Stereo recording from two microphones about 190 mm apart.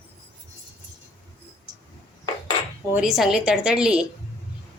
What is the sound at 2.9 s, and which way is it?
A woman's voice, centre (ahead or behind).